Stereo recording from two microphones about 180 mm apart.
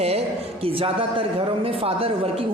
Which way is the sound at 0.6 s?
30° right (ahead or behind).